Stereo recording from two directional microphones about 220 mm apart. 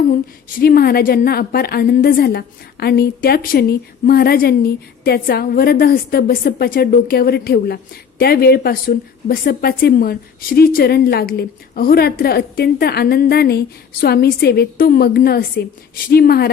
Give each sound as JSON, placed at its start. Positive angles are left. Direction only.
{"t": 0.1, "sound": "a woman's voice", "side_deg": 40}